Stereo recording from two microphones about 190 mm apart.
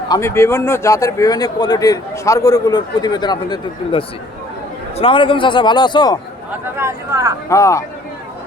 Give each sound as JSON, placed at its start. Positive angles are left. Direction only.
{"t": 0.1, "sound": "speech", "side_deg": 15}
{"t": 6.7, "sound": "speech", "side_deg": -15}
{"t": 7.5, "sound": "speech", "side_deg": 15}